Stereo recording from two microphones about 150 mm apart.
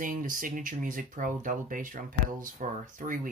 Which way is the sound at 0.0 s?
65° right (ahead or behind).